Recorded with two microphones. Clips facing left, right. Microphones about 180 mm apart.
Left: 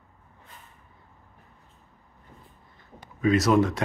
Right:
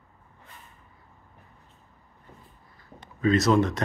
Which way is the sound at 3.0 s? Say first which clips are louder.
Even; 10° left (ahead or behind).